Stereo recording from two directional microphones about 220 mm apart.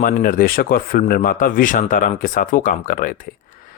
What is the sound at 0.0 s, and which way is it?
Speech, 40° left (ahead or behind).